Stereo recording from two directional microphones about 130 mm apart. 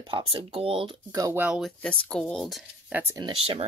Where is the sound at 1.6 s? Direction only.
10° left (ahead or behind).